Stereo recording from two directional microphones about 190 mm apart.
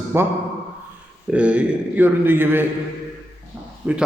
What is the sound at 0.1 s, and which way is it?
A man's voice, 10° right (ahead or behind).